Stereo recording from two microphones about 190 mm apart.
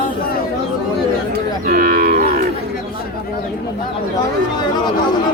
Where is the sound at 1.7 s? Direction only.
45° right (ahead or behind).